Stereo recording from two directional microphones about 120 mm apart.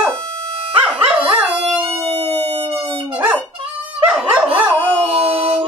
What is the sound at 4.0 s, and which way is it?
Dog, 15° right (ahead or behind).